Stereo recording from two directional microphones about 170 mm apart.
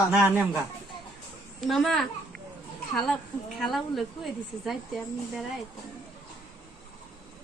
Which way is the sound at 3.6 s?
Centre (ahead or behind).